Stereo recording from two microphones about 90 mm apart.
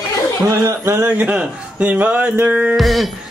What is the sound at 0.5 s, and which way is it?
A man's voice, 30° right (ahead or behind).